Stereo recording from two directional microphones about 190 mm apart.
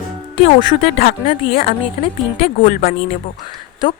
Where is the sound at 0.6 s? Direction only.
30° left (ahead or behind).